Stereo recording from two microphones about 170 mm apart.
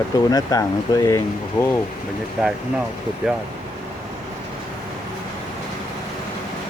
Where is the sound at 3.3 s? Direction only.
5° right (ahead or behind).